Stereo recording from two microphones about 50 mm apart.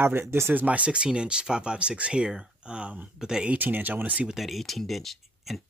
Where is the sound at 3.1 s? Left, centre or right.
Centre.